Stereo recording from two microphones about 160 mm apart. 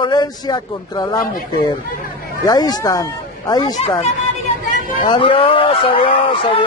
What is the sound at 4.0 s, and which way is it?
Chatter, 50° left (ahead or behind).